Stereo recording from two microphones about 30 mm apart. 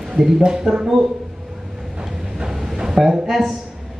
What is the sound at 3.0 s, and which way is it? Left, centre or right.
Speech, centre.